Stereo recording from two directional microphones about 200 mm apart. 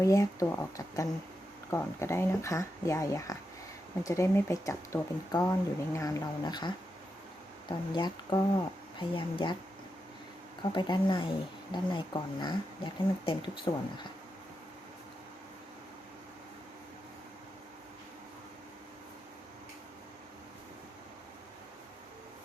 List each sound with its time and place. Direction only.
0.0 s speech: 15° left (ahead or behind)
10.6 s speech: 20° left (ahead or behind)